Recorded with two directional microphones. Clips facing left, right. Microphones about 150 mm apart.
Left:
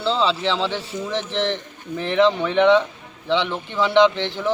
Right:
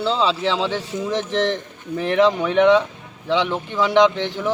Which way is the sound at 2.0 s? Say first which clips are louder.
Right 1 dB; 5° right (ahead or behind).